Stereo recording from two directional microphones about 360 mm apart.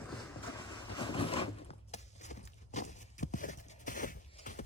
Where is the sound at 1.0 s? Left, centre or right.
Centre.